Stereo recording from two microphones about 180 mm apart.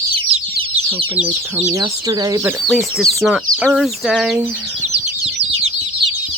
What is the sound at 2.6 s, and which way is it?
Speech, centre (ahead or behind).